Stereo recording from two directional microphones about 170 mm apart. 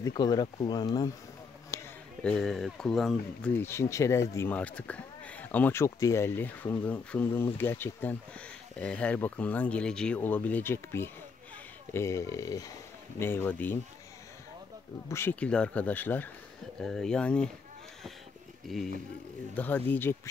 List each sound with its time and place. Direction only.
0.0 s speech: 25° left (ahead or behind)
1.7 s a sound: 20° left (ahead or behind)
2.2 s speech: 5° left (ahead or behind)
3.5 s speech: 15° left (ahead or behind)
15.0 s speech: 15° left (ahead or behind)
19.5 s speech: 10° left (ahead or behind)